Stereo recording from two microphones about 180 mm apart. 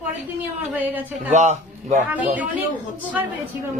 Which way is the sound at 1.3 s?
40° right (ahead or behind).